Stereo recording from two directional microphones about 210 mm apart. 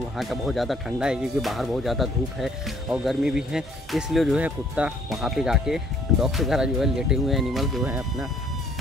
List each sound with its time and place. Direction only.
0.2 s speech: centre (ahead or behind)